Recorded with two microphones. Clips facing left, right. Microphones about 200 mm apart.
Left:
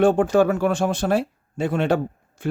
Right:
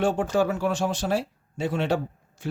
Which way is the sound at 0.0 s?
55° left (ahead or behind).